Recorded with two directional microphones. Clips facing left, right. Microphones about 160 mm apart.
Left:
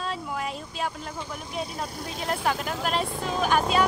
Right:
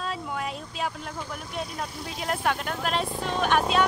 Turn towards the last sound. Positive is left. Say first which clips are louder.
# even
turn(degrees=0)  # may be behind; listen again after turning